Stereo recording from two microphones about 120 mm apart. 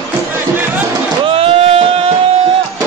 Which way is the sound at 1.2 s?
55° right (ahead or behind).